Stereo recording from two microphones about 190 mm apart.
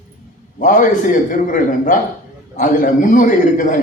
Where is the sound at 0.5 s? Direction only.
45° left (ahead or behind).